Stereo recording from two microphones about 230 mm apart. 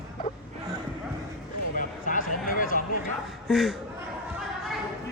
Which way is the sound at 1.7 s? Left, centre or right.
Left.